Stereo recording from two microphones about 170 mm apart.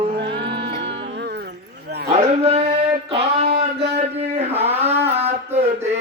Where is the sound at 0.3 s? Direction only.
80° right.